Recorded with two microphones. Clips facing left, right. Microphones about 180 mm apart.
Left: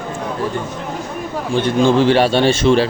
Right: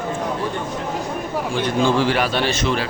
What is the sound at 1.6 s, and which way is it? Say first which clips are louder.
A man's voice: left 6 dB; 25° left (ahead or behind).